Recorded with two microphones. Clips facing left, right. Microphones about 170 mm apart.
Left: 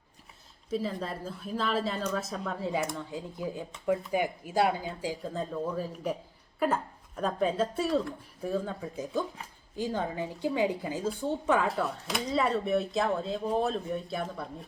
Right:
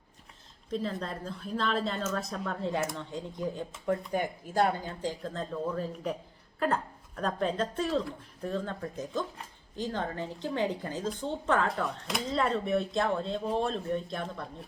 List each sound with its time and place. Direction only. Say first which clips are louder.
0.7 s a woman's voice: left 1 dB; 5° left (ahead or behind)
7.2 s speech: left 2 dB; 5° left (ahead or behind)